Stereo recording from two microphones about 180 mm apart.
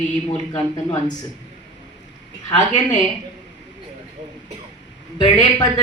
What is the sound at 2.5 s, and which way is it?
Speech, 25° left (ahead or behind).